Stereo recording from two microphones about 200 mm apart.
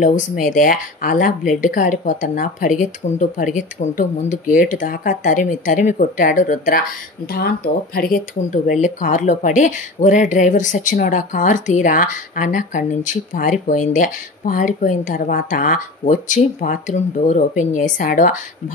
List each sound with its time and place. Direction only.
0.0 s speech: 40° left (ahead or behind)